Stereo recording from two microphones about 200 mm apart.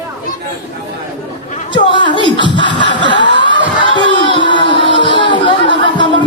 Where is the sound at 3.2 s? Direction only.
65° right (ahead or behind).